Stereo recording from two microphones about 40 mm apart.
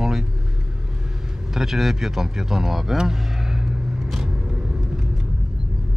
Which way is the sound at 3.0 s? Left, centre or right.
Centre.